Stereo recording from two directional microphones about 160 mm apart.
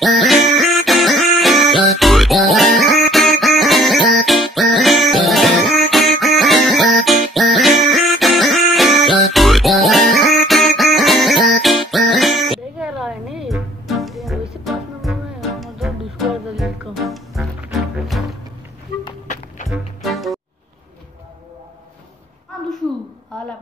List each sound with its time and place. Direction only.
0.0 s music: centre (ahead or behind)
19.2 s music: 50° left (ahead or behind)
19.7 s music: centre (ahead or behind)